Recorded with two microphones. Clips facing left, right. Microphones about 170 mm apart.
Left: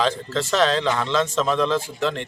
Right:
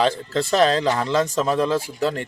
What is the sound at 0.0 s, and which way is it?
A man's voice, 35° right (ahead or behind).